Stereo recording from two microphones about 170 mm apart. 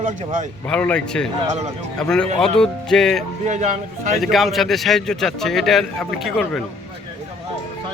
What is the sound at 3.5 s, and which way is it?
Speech, 45° right (ahead or behind).